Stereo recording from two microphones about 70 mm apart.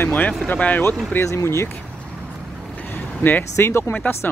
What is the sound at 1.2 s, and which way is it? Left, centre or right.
Speech, left.